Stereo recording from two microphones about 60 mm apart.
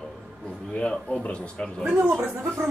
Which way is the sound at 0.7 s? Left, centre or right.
Centre.